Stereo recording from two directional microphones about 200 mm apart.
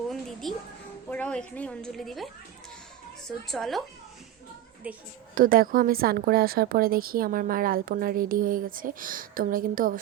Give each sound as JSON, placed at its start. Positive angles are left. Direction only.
{"t": 0.1, "sound": "a sound", "side_deg": 0}
{"t": 1.1, "sound": "a woman's voice", "side_deg": 5}
{"t": 5.3, "sound": "a woman's voice", "side_deg": -45}